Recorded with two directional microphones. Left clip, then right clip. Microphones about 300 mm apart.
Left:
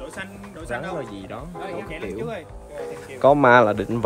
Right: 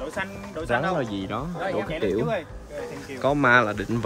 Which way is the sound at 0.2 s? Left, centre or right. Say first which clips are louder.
Right 4 dB; right.